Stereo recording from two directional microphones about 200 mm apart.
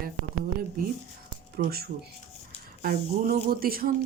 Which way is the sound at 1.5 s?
50° right (ahead or behind).